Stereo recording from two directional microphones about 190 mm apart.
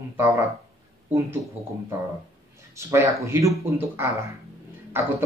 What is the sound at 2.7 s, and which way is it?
Speech, 15° right (ahead or behind).